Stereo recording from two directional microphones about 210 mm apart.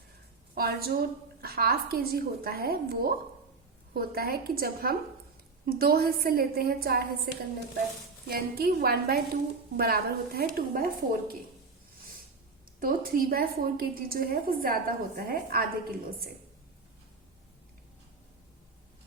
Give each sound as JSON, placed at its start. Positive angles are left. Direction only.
{"t": 0.5, "sound": "a woman's voice", "side_deg": -45}
{"t": 8.3, "sound": "a woman's voice", "side_deg": -45}
{"t": 12.8, "sound": "a woman's voice", "side_deg": -45}